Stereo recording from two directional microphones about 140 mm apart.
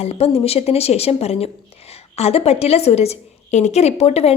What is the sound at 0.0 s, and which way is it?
Speech, 45° left (ahead or behind).